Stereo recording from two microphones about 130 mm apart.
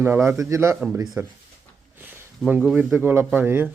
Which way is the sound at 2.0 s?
15° right (ahead or behind).